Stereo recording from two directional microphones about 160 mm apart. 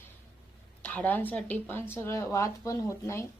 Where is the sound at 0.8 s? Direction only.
10° left (ahead or behind).